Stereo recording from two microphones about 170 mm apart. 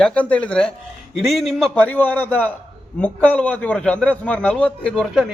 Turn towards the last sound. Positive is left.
turn(degrees=0)  # may be behind; listen again after turning